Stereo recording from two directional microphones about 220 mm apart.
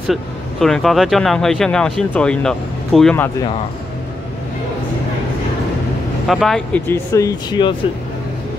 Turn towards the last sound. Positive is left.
turn(degrees=20)  # may be behind; listen again after turning